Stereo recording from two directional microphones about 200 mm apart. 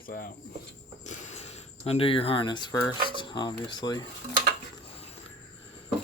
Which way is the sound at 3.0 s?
25° left (ahead or behind).